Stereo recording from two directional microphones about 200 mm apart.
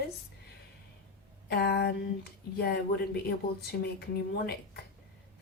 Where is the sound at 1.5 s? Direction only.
55° left (ahead or behind).